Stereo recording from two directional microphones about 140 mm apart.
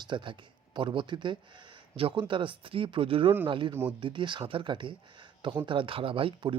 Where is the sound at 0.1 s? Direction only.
35° right (ahead or behind).